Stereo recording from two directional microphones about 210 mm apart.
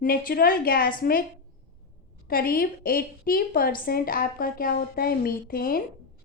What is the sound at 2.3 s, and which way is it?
A woman's voice, 45° left (ahead or behind).